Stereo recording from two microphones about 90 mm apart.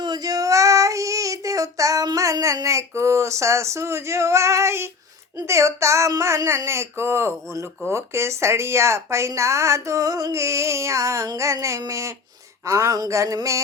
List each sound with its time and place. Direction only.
0.0 s child singing: 50° right (ahead or behind); by 4.9 s 30° right (ahead or behind)
5.5 s speech: 35° right (ahead or behind)